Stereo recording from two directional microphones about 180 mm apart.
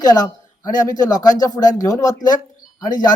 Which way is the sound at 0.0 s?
20° left (ahead or behind).